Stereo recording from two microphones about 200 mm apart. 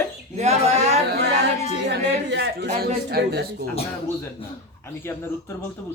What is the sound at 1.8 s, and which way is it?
A woman's voice, 60° right (ahead or behind).